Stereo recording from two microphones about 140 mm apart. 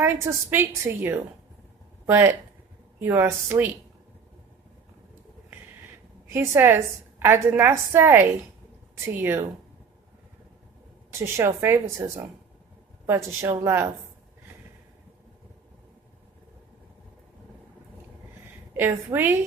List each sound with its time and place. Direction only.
0.0 s a woman's voice: 15° right (ahead or behind)
6.2 s a woman's voice: 20° right (ahead or behind)
11.1 s a woman's voice: 20° right (ahead or behind)
18.7 s a woman's voice: 15° right (ahead or behind)